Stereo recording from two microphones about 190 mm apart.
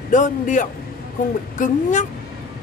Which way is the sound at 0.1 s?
40° left (ahead or behind).